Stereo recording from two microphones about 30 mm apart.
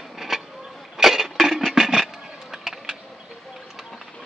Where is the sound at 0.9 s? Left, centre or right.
Centre.